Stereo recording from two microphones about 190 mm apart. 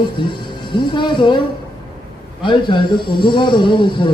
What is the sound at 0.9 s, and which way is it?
Speech, 25° left (ahead or behind).